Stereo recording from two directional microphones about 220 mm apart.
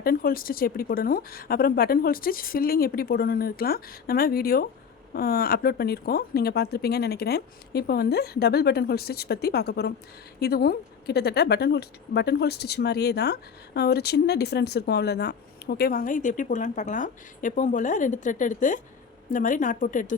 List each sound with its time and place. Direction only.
0.0 s a woman's voice: 40° left (ahead or behind)